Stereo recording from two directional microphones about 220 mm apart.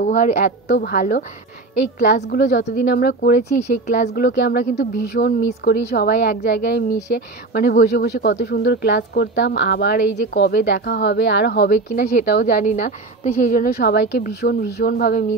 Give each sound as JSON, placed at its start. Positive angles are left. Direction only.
{"t": 0.0, "sound": "a woman's voice", "side_deg": 35}
{"t": 4.1, "sound": "a woman's voice", "side_deg": 50}